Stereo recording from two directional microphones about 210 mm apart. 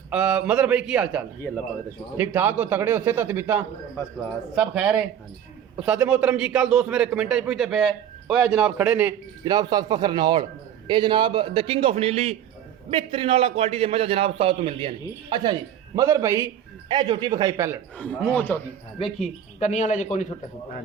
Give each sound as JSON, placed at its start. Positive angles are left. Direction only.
{"t": 0.1, "sound": "a man's voice", "side_deg": -5}
{"t": 9.4, "sound": "a man's voice", "side_deg": -20}
{"t": 17.9, "sound": "a man's voice", "side_deg": 5}
{"t": 19.5, "sound": "speech", "side_deg": 35}